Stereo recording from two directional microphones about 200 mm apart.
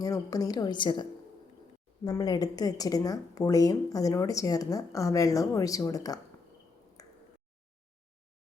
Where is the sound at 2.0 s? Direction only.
20° left (ahead or behind).